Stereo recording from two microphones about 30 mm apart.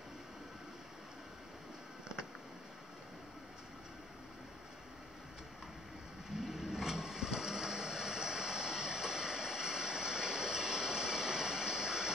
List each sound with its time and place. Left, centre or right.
6.4 s vehicle: centre